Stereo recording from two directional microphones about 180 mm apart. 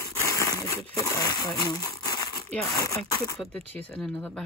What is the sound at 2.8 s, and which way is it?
Speech, 15° left (ahead or behind).